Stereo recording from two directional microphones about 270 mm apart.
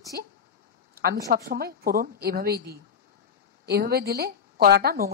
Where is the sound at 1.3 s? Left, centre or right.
Right.